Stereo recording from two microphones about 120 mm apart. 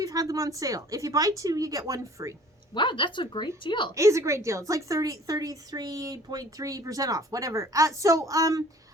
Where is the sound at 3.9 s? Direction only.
25° right (ahead or behind).